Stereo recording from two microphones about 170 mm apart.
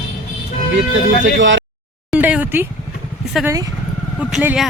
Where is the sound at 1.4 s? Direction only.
90° right.